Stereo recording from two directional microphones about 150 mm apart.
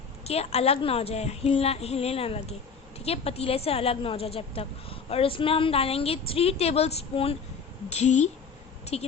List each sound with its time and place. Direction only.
0.3 s a woman's voice: 40° left (ahead or behind)